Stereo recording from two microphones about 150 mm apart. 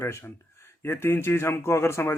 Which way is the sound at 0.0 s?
15° left (ahead or behind).